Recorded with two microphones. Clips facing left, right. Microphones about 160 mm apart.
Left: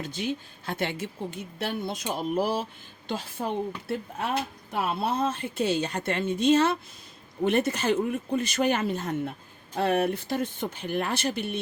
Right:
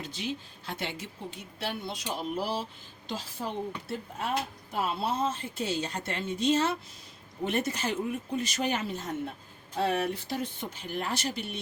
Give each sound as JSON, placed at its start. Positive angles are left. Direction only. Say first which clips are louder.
{"t": 0.0, "sound": "a woman's voice", "louder": "left 5 dB", "side_deg": 50}